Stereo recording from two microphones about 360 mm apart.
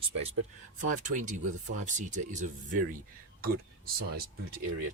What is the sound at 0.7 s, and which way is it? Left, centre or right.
Speech, right.